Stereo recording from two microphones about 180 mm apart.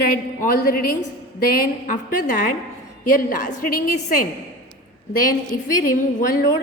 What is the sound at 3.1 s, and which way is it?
A woman's voice, 50° left (ahead or behind).